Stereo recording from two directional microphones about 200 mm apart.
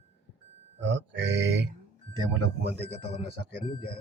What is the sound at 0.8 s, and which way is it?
Speech, 60° right (ahead or behind).